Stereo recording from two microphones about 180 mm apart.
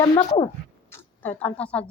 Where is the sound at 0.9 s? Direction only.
10° left (ahead or behind).